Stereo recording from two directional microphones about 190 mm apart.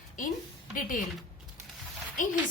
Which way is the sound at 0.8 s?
45° left (ahead or behind).